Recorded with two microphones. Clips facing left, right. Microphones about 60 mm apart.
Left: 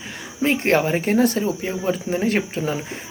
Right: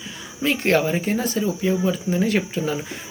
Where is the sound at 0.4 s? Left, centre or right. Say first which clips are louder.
Left 1 dB; left.